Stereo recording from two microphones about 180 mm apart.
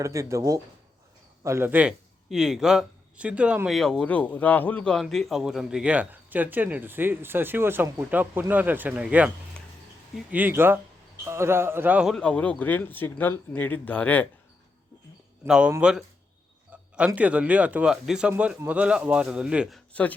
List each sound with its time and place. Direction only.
0.0 s a man's voice: 15° right (ahead or behind)
10.3 s a man's voice: 10° right (ahead or behind)
12.1 s speech: 5° left (ahead or behind)
15.4 s speech: 5° right (ahead or behind)
17.2 s a man's voice: 10° right (ahead or behind)
19.9 s speech: 10° left (ahead or behind)